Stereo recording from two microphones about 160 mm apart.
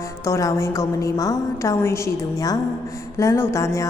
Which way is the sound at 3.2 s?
15° left (ahead or behind).